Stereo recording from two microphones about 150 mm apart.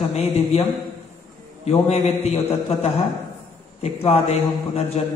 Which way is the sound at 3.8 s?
45° left (ahead or behind).